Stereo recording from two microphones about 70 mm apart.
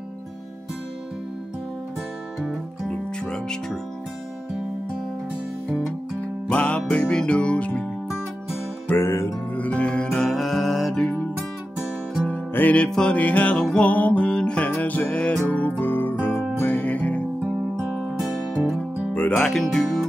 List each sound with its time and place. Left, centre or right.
2.9 s music: centre
6.5 s music: centre
8.8 s music: left
9.6 s music: centre
12.3 s music: left
16.7 s music: left
17.7 s music: centre
19.3 s speech: centre